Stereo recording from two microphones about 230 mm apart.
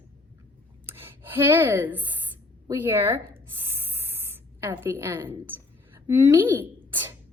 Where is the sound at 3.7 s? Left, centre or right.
Centre.